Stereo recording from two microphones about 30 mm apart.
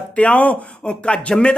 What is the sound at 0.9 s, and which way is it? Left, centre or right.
Speech, left.